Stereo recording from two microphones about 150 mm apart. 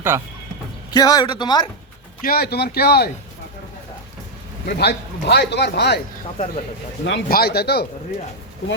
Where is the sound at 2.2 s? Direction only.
85° left.